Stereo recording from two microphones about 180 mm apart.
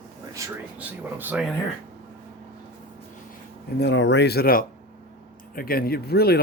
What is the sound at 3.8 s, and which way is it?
Speech, 75° left (ahead or behind).